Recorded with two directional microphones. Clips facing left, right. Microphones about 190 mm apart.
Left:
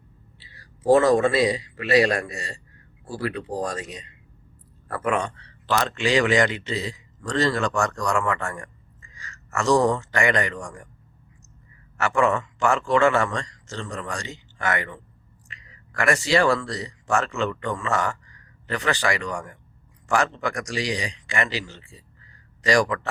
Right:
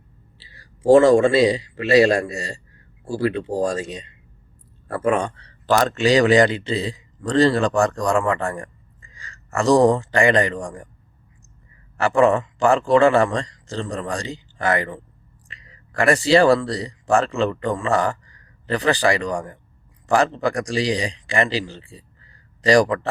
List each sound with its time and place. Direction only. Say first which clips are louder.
0.3 s speech: right 2 dB; 30° right (ahead or behind)
11.9 s a man's voice: right 5 dB; 35° right (ahead or behind)